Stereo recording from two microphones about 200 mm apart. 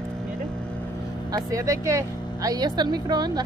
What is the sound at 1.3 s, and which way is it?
Speech, 15° right (ahead or behind).